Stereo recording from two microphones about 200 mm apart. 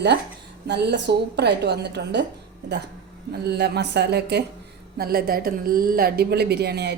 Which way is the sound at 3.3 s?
55° right (ahead or behind).